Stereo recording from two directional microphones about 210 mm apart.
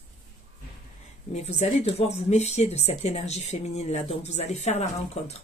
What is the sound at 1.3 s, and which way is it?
Speech, 30° left (ahead or behind).